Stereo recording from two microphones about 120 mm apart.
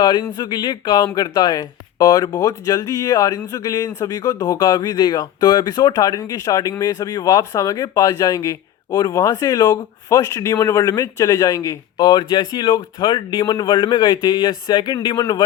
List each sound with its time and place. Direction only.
0.0 s speech: 35° left (ahead or behind)